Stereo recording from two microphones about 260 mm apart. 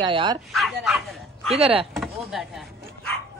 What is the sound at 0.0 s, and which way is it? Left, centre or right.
Speech, centre.